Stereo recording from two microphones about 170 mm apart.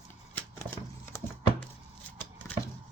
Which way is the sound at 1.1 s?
15° left (ahead or behind).